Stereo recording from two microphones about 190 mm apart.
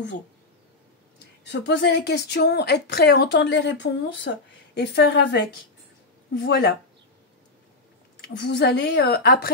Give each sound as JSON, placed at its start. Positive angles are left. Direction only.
{"t": 1.2, "sound": "speech", "side_deg": 65}
{"t": 8.2, "sound": "speech", "side_deg": 65}